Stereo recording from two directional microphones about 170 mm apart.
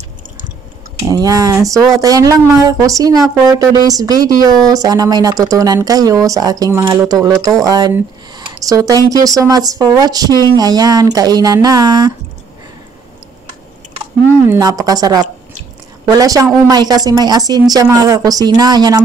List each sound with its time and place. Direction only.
1.0 s speech: 20° right (ahead or behind)
14.5 s speech: 20° right (ahead or behind)